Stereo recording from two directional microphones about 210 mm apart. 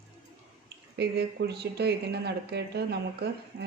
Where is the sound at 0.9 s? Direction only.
50° right (ahead or behind).